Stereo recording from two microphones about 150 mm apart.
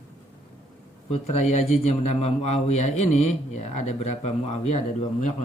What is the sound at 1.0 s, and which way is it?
A man's voice, 45° left (ahead or behind).